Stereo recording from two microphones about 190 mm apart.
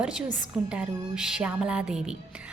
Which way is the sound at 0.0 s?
5° right (ahead or behind).